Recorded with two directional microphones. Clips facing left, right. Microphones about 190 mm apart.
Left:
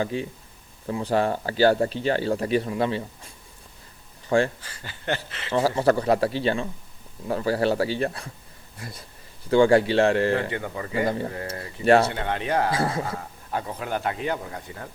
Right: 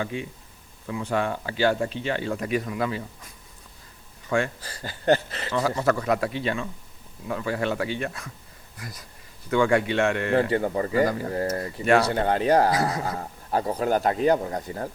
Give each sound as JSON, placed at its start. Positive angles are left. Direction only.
{"t": 0.0, "sound": "speech", "side_deg": 35}
{"t": 4.6, "sound": "speech", "side_deg": -40}
{"t": 5.5, "sound": "speech", "side_deg": 30}
{"t": 10.3, "sound": "speech", "side_deg": -35}
{"t": 10.9, "sound": "speech", "side_deg": 25}
{"t": 12.0, "sound": "speech", "side_deg": -40}
{"t": 12.7, "sound": "speech", "side_deg": 30}
{"t": 13.1, "sound": "speech", "side_deg": -35}